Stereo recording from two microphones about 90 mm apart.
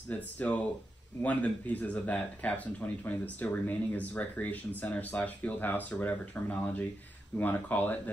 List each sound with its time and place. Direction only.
0.1 s speech: 15° left (ahead or behind)